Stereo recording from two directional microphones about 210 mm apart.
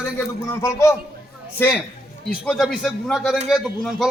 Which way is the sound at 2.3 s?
Centre (ahead or behind).